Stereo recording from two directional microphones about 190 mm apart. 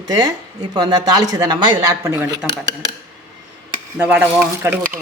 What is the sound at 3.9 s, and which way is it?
Speech, 10° right (ahead or behind).